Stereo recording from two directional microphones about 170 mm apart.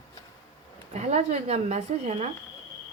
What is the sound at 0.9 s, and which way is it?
Speech, 40° right (ahead or behind).